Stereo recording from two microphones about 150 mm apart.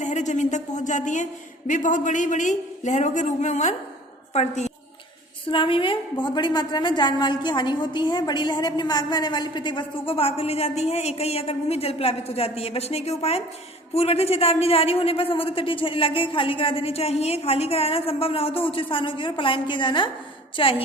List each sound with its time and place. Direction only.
0.0 s a man's voice: 55° left (ahead or behind)
5.5 s a woman's voice: 35° left (ahead or behind)